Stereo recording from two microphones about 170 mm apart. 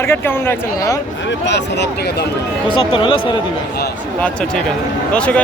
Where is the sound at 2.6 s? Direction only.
30° left (ahead or behind).